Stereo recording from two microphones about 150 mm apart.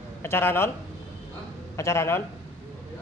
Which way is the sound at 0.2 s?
15° left (ahead or behind).